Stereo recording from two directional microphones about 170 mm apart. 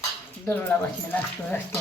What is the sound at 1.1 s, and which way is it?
Speech, 10° left (ahead or behind).